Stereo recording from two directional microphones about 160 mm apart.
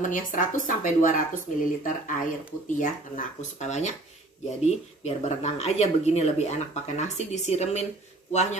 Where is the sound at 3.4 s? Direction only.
45° left (ahead or behind).